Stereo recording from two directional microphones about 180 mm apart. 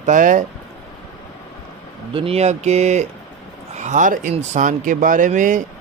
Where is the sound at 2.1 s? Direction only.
35° right (ahead or behind).